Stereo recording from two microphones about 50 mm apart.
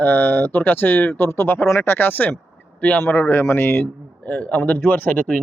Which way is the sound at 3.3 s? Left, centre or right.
Left.